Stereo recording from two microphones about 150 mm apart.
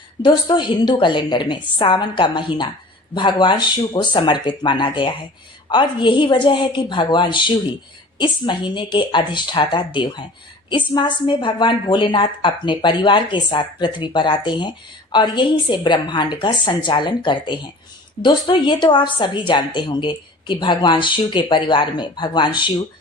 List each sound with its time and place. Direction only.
0.2 s a woman's voice: 30° left (ahead or behind)